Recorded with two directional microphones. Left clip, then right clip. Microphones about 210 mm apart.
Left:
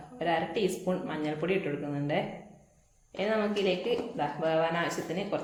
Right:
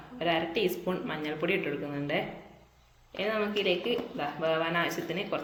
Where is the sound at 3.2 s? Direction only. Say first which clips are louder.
Left 1 dB; 50° right (ahead or behind).